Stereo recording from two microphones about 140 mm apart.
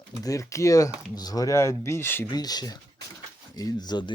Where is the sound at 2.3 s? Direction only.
30° left (ahead or behind).